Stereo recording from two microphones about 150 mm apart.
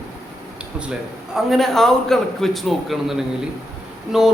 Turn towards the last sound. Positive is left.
turn(degrees=-5)  # may be behind; listen again after turning